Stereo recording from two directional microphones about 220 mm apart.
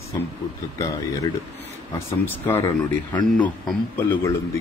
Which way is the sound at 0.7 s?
15° left (ahead or behind).